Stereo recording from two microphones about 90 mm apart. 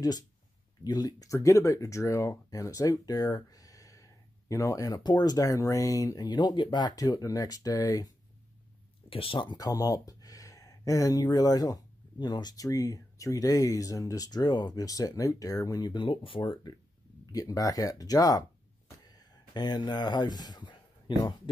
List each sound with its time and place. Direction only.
0.8 s speech: 45° left (ahead or behind)
5.0 s speech: 50° left (ahead or behind)
9.1 s speech: 75° left (ahead or behind)
9.7 s speech: 40° left (ahead or behind); by 16.7 s 60° left (ahead or behind)
17.3 s speech: 40° left (ahead or behind); by 21.2 s 60° left (ahead or behind)